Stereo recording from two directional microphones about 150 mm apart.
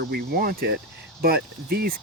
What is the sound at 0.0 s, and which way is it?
Speech, 90° right.